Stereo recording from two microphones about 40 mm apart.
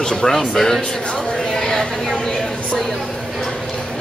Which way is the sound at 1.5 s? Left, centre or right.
Centre.